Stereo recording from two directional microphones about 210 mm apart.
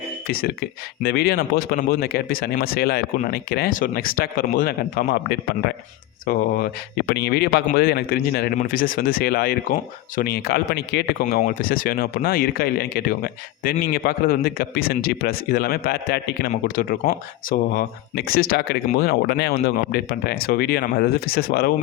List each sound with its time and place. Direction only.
0.3 s speech: 45° left (ahead or behind)